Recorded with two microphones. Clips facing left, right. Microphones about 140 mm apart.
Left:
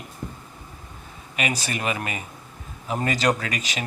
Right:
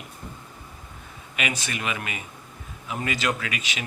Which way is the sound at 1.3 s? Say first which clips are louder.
Left 3 dB; 35° left (ahead or behind).